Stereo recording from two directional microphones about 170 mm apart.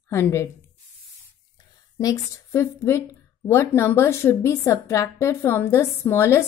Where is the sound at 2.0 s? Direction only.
20° left (ahead or behind).